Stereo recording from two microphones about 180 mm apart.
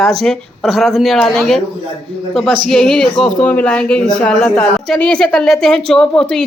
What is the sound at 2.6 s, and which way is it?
Speech, 5° left (ahead or behind).